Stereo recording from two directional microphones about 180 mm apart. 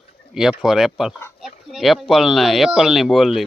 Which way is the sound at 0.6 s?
Centre (ahead or behind).